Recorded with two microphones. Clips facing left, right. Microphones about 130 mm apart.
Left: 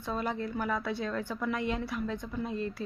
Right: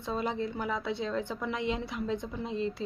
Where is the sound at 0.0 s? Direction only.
20° right (ahead or behind).